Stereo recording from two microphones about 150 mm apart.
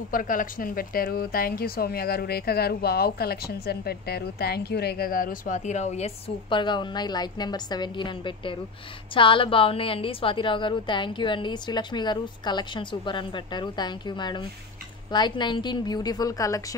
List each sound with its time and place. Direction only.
0.1 s a woman's voice: 65° left (ahead or behind); by 16.6 s 20° left (ahead or behind)